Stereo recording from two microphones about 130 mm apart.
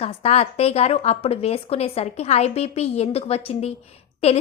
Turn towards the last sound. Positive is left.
turn(degrees=50)  # may be behind; listen again after turning